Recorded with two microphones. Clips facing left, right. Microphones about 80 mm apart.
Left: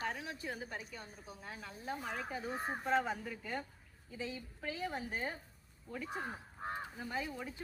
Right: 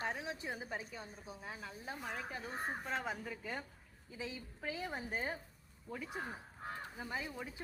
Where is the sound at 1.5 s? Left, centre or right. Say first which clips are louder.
Left 3 dB; centre.